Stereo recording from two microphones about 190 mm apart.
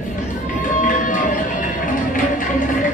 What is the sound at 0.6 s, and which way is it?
Music, 45° left (ahead or behind).